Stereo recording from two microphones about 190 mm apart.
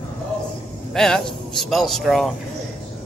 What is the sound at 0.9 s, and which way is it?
A man's voice, 5° left (ahead or behind).